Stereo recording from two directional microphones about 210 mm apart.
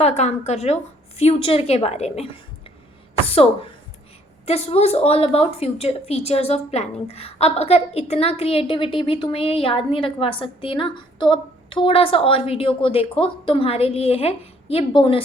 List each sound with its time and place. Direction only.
0.0 s a woman's voice: 30° left (ahead or behind)